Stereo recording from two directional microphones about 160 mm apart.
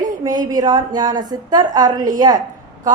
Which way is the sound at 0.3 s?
25° right (ahead or behind).